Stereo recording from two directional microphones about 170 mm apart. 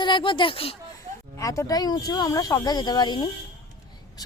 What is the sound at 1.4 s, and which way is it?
Speech, 20° left (ahead or behind).